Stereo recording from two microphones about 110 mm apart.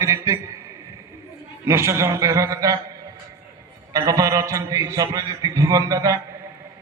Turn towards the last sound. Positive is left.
turn(degrees=-30)  # may be behind; listen again after turning